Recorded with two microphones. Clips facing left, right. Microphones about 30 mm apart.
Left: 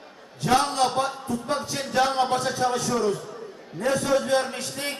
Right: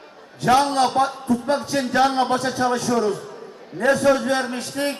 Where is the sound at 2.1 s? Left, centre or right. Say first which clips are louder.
Right 3 dB; right.